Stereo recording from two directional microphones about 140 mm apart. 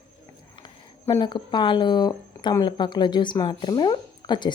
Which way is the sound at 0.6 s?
30° left (ahead or behind).